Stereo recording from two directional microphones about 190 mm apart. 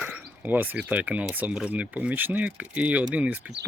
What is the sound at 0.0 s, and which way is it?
Speech, 10° right (ahead or behind).